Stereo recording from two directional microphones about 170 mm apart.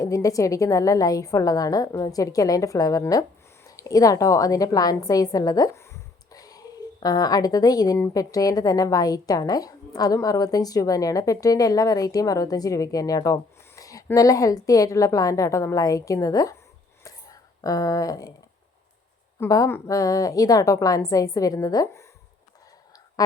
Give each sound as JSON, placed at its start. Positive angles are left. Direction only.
{"t": 0.0, "sound": "a woman's voice", "side_deg": 20}
{"t": 17.0, "sound": "a sound", "side_deg": 20}
{"t": 19.4, "sound": "a woman's voice", "side_deg": 20}